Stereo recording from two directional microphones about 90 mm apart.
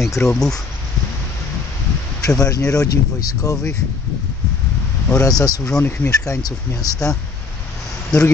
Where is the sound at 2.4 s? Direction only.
40° left (ahead or behind).